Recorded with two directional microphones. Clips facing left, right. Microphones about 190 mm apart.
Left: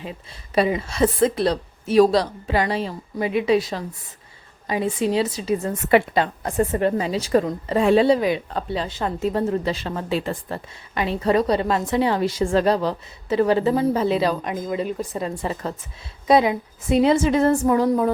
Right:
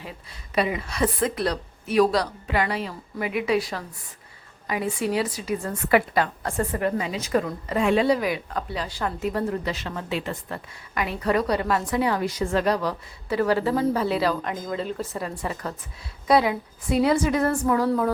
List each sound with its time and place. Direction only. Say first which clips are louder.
0.0 s a woman's voice: left 5 dB; 25° left (ahead or behind)